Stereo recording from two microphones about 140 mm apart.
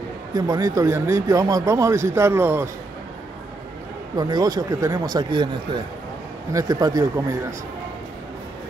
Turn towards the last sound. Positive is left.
turn(degrees=-25)  # may be behind; listen again after turning